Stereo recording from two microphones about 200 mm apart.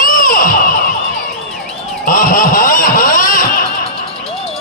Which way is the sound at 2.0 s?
45° left (ahead or behind).